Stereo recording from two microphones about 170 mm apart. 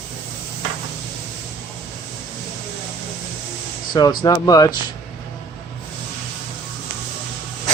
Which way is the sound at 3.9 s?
25° left (ahead or behind).